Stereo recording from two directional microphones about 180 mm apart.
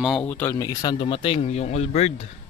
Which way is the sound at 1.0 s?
30° left (ahead or behind).